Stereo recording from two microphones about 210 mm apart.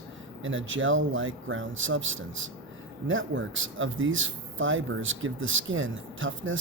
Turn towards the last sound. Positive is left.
turn(degrees=-65)  # may be behind; listen again after turning